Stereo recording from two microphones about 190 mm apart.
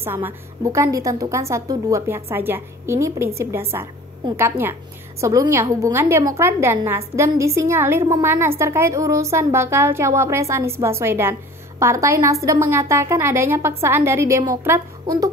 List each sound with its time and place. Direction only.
0.0 s a woman's voice: 10° right (ahead or behind)